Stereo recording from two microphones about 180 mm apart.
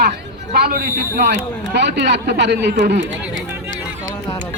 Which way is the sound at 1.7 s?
75° right (ahead or behind).